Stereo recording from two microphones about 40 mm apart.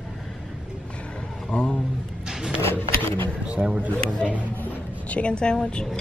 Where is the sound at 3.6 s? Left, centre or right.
Right.